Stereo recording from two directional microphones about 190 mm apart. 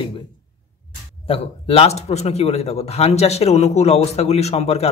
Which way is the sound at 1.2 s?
30° left (ahead or behind).